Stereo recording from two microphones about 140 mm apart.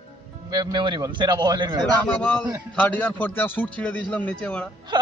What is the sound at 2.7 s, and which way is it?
A man's voice, 10° left (ahead or behind).